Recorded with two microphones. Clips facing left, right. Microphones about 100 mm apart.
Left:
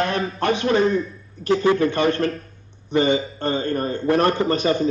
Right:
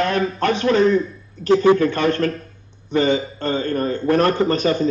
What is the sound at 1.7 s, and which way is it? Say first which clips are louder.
A man's voice: right 1 dB; 50° right (ahead or behind).